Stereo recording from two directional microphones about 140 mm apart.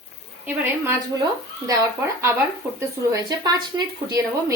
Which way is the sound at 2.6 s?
15° right (ahead or behind).